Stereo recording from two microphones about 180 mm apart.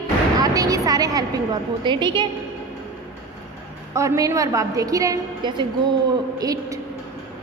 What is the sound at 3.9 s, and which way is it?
A woman's voice, 20° right (ahead or behind).